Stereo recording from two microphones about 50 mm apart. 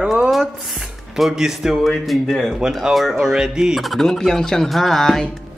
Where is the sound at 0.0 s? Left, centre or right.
Centre.